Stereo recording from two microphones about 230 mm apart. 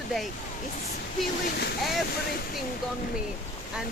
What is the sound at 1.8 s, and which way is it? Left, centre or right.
Speech, centre.